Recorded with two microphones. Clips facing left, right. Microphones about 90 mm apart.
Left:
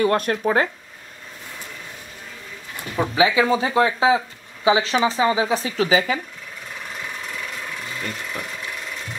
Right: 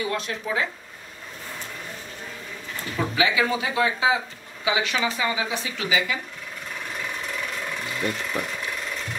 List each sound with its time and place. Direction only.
0.0 s speech: 55° left (ahead or behind)
3.0 s speech: 25° left (ahead or behind)
8.3 s speech: 25° right (ahead or behind)